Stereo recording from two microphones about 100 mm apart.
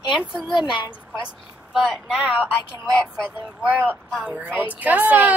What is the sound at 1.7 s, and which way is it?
Speech, 10° right (ahead or behind).